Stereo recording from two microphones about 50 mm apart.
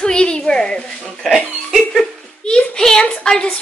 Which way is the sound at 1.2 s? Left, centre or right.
Centre.